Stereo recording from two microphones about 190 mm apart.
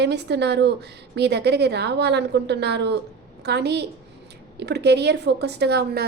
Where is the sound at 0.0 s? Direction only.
60° right (ahead or behind).